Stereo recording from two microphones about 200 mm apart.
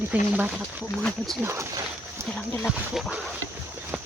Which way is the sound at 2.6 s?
Centre (ahead or behind).